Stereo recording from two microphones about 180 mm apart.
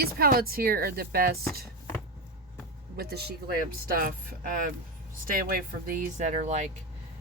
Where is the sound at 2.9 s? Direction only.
60° right (ahead or behind); by 6.7 s 40° right (ahead or behind).